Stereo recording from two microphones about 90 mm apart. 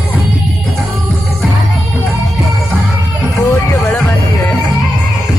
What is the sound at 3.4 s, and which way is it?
Vehicle, 35° left (ahead or behind).